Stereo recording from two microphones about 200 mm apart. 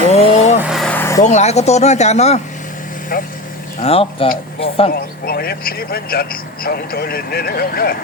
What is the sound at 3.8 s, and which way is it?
Speech, 30° left (ahead or behind).